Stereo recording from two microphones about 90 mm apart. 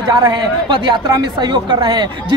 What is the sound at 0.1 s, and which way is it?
A man's voice, 55° right (ahead or behind).